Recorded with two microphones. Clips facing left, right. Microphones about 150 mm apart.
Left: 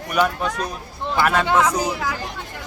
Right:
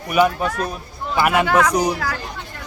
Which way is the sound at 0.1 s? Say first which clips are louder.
Right 4 dB; 5° right (ahead or behind).